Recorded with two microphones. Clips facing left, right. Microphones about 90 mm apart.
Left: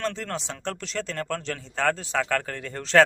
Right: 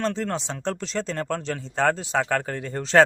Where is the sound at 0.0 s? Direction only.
25° right (ahead or behind).